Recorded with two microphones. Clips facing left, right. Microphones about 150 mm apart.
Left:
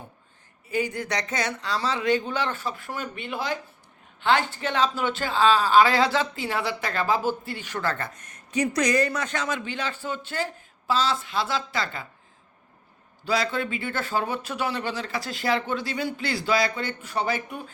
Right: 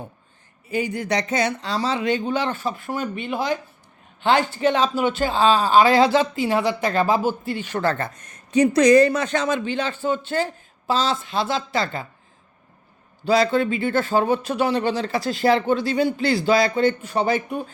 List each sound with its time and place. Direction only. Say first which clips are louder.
0.9 s speech: right 6 dB; 20° right (ahead or behind)
13.2 s speech: right 8 dB; 25° right (ahead or behind)